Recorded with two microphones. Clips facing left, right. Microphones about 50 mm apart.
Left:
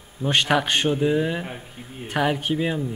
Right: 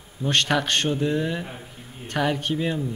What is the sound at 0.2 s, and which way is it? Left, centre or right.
A man's voice, centre.